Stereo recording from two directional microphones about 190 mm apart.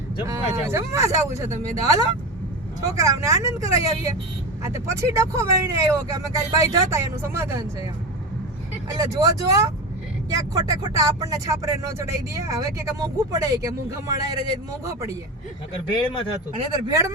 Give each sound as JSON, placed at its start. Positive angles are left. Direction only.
{"t": 0.3, "sound": "speech", "side_deg": -15}
{"t": 9.0, "sound": "speech", "side_deg": -20}
{"t": 15.7, "sound": "speech", "side_deg": 25}
{"t": 16.8, "sound": "speech", "side_deg": -15}